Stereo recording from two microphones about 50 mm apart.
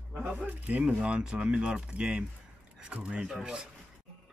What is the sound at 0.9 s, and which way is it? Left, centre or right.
Speech, centre.